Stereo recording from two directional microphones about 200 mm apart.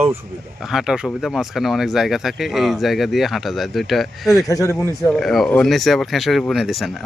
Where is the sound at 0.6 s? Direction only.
Centre (ahead or behind).